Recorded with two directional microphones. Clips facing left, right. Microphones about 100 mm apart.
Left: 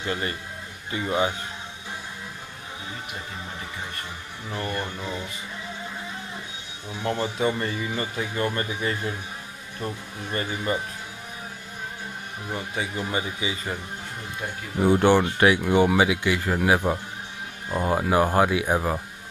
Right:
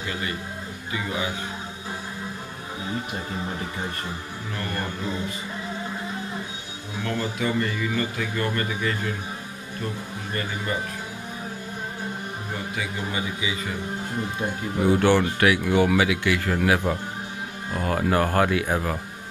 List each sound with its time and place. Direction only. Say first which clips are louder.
0.0 s a man's voice: left 1 dB; 35° left (ahead or behind)
7.0 s a man's voice: left 2 dB; 30° left (ahead or behind)
10.7 s a man's voice: left 2 dB; 25° left (ahead or behind)
12.7 s a man's voice: left 2 dB; 35° left (ahead or behind)
14.9 s a man's voice: left 1 dB; 20° left (ahead or behind)